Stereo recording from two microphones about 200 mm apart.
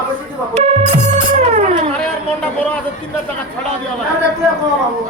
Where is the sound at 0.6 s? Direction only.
30° right (ahead or behind).